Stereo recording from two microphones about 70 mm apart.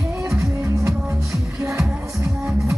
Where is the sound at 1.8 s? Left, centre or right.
Centre.